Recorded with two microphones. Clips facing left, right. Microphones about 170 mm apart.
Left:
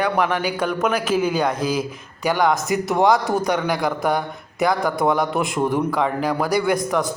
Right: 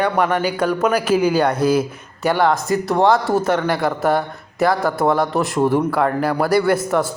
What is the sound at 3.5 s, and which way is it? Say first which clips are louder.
A man's voice: right 3 dB; 5° right (ahead or behind).